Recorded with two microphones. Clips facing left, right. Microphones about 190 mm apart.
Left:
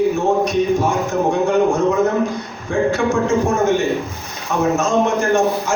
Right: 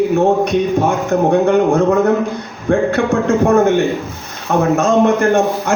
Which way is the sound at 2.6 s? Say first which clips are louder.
Right 3 dB; 60° right (ahead or behind).